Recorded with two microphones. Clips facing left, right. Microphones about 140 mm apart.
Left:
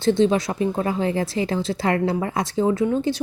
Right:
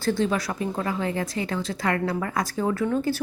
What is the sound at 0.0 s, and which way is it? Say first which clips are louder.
A woman's voice: left 6 dB; 25° left (ahead or behind).